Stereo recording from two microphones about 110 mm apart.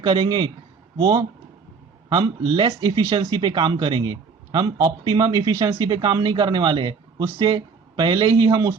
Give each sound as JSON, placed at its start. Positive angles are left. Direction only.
{"t": 0.0, "sound": "a man's voice", "side_deg": -40}
{"t": 2.6, "sound": "speech", "side_deg": -55}
{"t": 3.2, "sound": "a man's voice", "side_deg": -40}